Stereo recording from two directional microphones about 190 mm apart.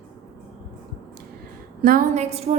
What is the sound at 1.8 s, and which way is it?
Speech, 50° right (ahead or behind).